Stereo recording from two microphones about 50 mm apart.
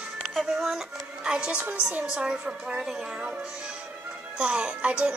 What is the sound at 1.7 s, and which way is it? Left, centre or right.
Speech, right.